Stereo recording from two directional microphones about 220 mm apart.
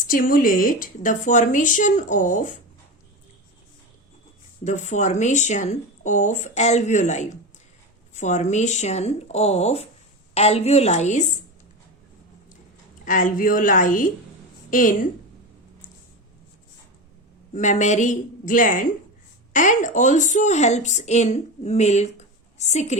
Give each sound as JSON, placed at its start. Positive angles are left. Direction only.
{"t": 0.1, "sound": "speech", "side_deg": 40}
{"t": 4.6, "sound": "speech", "side_deg": 35}
{"t": 13.1, "sound": "speech", "side_deg": 35}
{"t": 17.5, "sound": "speech", "side_deg": 35}